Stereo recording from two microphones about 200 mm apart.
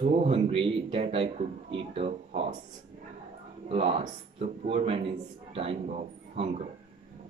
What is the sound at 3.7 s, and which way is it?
Speech, 30° right (ahead or behind).